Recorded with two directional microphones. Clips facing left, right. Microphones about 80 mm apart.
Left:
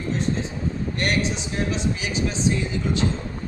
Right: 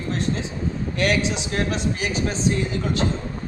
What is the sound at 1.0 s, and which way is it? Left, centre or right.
A man's voice, right.